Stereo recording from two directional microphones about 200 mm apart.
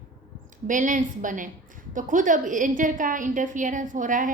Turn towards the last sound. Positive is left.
turn(degrees=-40)  # may be behind; listen again after turning